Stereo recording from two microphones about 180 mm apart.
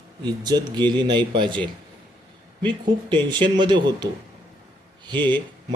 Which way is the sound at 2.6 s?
25° right (ahead or behind).